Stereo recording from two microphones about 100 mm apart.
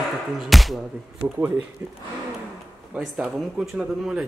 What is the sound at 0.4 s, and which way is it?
Speech, centre (ahead or behind).